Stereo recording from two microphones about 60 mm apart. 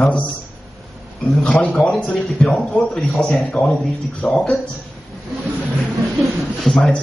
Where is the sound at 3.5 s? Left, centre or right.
Centre.